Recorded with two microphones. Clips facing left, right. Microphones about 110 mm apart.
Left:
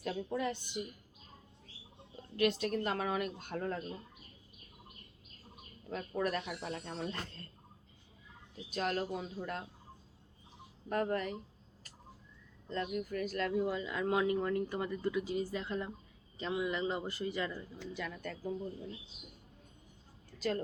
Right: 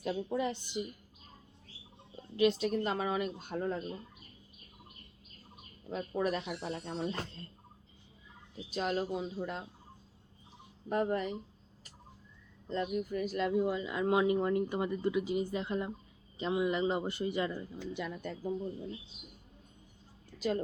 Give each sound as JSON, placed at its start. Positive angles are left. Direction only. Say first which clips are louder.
{"t": 0.0, "sound": "speech", "louder": "right 3 dB", "side_deg": -10}
{"t": 2.3, "sound": "speech", "louder": "right 3 dB", "side_deg": -5}
{"t": 5.9, "sound": "speech", "louder": "right 2 dB", "side_deg": -10}
{"t": 8.7, "sound": "speech", "louder": "right 2 dB", "side_deg": -5}
{"t": 10.8, "sound": "speech", "louder": "right 2 dB", "side_deg": -10}
{"t": 12.6, "sound": "a man's voice", "louder": "right 3 dB", "side_deg": -15}